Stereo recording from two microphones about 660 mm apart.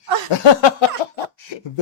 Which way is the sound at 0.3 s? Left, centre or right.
Left.